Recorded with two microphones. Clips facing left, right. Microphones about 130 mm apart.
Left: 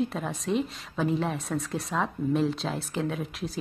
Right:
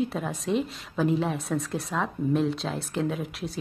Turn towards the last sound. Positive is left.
turn(degrees=0)  # may be behind; listen again after turning